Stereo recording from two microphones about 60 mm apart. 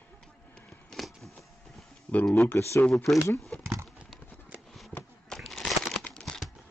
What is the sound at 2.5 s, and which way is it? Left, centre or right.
Speech, left.